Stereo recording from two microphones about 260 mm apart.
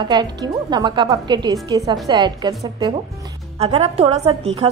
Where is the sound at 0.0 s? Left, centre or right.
Centre.